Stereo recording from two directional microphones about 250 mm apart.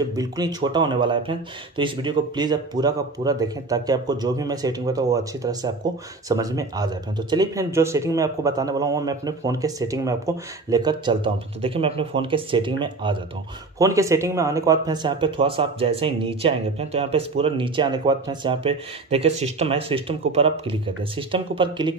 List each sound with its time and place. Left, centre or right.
0.1 s speech: centre